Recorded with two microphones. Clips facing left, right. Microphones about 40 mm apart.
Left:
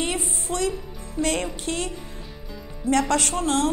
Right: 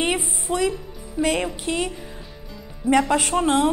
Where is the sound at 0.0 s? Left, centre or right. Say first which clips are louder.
Right 4 dB; right.